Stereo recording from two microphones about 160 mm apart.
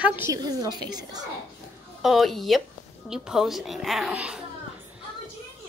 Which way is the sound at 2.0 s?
Centre (ahead or behind).